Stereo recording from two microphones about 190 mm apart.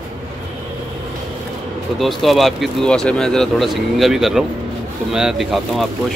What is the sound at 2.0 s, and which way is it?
Speech, centre (ahead or behind).